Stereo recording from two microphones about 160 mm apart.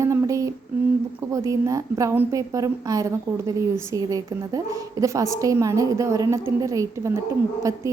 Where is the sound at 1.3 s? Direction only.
20° right (ahead or behind).